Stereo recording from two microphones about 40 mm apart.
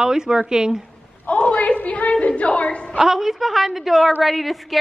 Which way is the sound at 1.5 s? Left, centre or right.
Left.